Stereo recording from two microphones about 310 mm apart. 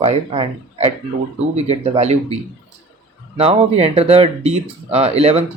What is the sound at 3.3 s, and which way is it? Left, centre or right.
Speech, centre.